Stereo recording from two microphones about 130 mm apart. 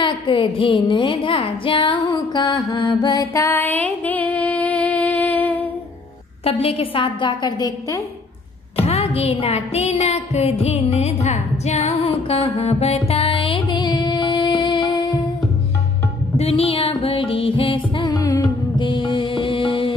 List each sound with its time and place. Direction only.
0.0 s music: 40° left (ahead or behind); by 5.7 s 10° left (ahead or behind)
6.4 s a woman's voice: 50° left (ahead or behind); by 8.0 s 30° left (ahead or behind)
8.8 s music: 50° left (ahead or behind); by 15.1 s 35° left (ahead or behind)
16.3 s music: 50° left (ahead or behind)